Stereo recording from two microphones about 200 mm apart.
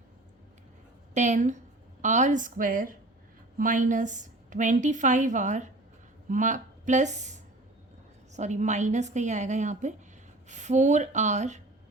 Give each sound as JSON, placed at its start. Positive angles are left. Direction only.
{"t": 1.1, "sound": "a woman's voice", "side_deg": -35}